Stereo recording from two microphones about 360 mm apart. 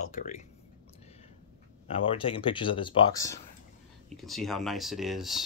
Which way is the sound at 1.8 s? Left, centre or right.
Centre.